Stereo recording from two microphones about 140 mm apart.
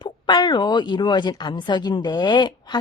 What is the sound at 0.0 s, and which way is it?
A woman's voice, 30° left (ahead or behind).